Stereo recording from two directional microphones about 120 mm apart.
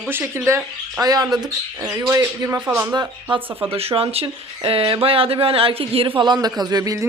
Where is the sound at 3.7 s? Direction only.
55° right (ahead or behind).